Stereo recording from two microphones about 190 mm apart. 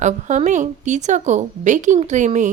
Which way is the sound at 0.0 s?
40° right (ahead or behind).